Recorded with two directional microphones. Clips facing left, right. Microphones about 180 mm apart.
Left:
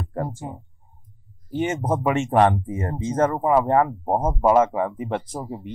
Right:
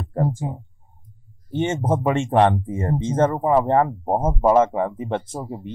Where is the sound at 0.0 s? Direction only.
30° right (ahead or behind).